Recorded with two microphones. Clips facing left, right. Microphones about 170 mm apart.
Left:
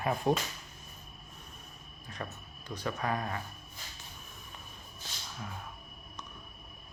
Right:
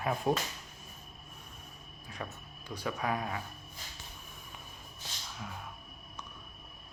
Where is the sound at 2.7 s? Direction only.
10° right (ahead or behind).